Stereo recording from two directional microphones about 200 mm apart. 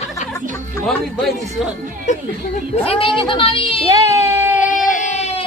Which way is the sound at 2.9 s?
25° left (ahead or behind).